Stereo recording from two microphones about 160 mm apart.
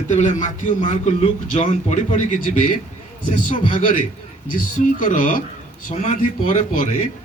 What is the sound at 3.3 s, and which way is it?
A man's voice, 55° left (ahead or behind).